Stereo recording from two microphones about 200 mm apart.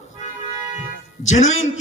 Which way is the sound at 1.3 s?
35° left (ahead or behind).